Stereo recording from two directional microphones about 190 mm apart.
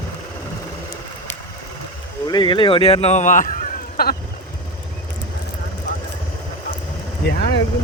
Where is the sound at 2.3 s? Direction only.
25° left (ahead or behind); by 4.1 s 50° left (ahead or behind).